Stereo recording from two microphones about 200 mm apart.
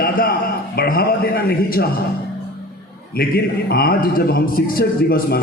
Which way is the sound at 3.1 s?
50° left (ahead or behind).